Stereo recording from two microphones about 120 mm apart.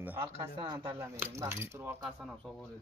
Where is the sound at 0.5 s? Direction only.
45° right (ahead or behind).